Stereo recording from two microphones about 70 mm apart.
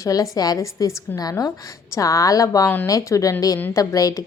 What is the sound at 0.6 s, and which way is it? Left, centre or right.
A woman's voice, left.